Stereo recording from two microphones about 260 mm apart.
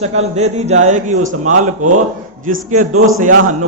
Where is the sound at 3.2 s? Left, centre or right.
Right.